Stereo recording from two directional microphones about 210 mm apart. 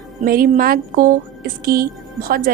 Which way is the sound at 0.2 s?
45° right (ahead or behind).